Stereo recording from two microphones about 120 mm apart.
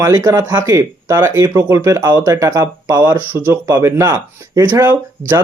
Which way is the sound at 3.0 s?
20° right (ahead or behind).